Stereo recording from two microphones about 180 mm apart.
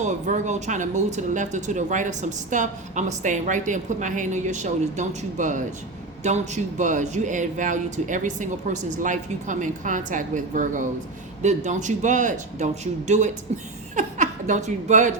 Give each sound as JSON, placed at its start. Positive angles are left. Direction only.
{"t": 0.0, "sound": "a woman's voice", "side_deg": -40}